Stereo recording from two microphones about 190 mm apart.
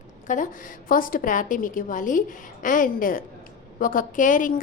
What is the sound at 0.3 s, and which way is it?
A woman's voice, 40° left (ahead or behind).